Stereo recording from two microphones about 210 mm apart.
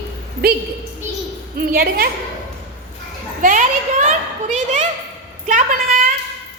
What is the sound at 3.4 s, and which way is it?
A woman's voice, 40° right (ahead or behind).